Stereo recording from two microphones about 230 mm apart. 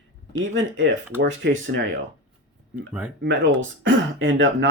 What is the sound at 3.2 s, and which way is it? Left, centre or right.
Speech, right.